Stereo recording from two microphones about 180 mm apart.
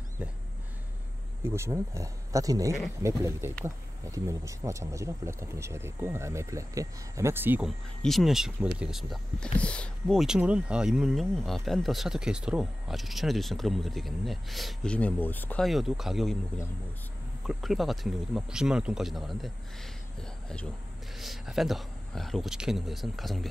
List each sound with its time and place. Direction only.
1.4 s speech: 15° right (ahead or behind)
8.0 s speech: centre (ahead or behind)
17.5 s speech: centre (ahead or behind)